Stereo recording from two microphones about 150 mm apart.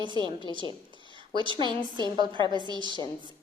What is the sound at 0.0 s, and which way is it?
Speech, 30° right (ahead or behind).